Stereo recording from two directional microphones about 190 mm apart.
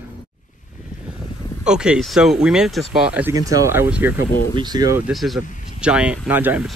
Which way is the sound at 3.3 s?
20° right (ahead or behind).